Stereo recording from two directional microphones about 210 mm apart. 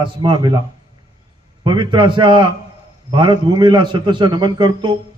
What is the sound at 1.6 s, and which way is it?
A man's voice, 20° right (ahead or behind).